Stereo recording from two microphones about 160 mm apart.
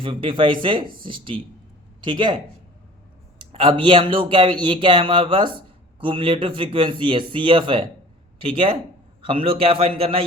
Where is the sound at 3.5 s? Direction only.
35° right (ahead or behind).